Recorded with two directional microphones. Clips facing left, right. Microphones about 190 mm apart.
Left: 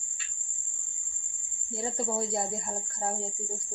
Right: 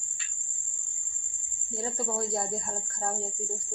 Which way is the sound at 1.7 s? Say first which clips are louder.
Left 1 dB; 10° left (ahead or behind).